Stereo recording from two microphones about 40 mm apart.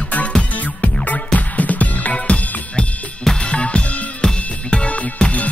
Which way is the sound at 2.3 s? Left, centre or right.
Left.